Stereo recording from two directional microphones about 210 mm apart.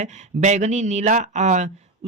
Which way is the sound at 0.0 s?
35° right (ahead or behind).